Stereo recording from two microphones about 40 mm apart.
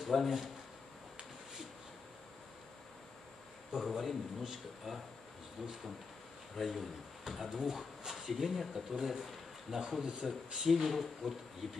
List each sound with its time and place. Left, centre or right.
0.0 s speech: centre
3.7 s speech: centre